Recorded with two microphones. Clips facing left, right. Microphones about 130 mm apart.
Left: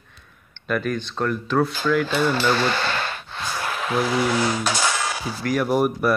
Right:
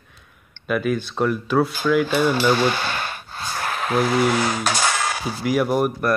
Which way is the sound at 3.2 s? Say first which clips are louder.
Right 1 dB; 45° right (ahead or behind).